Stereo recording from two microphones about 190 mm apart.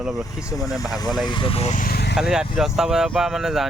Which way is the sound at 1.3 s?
25° left (ahead or behind).